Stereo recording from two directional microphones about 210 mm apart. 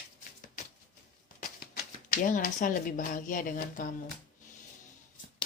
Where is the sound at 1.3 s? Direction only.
40° left (ahead or behind).